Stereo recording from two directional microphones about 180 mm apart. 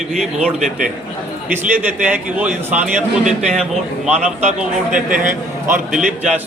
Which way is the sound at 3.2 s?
40° right (ahead or behind).